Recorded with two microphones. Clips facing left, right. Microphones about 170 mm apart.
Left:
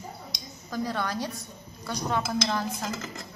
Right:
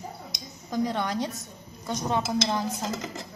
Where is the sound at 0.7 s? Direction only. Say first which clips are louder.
Right 3 dB; 20° right (ahead or behind).